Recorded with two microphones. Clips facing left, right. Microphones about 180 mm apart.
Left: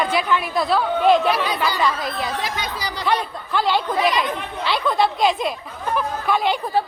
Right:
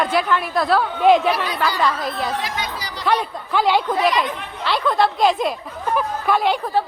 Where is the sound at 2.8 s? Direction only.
90° left.